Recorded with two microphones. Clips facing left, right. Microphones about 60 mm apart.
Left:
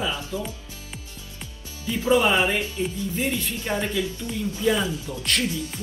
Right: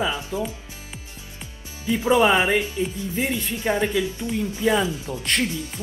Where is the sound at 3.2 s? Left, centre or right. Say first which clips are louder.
Right 4 dB; right.